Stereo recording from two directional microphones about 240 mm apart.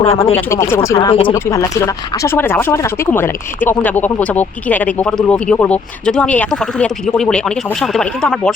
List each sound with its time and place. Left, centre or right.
0.0 s speech: left
0.3 s speech: centre